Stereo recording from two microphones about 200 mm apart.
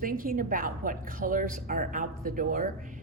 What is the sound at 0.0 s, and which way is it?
A woman's voice, 45° right (ahead or behind).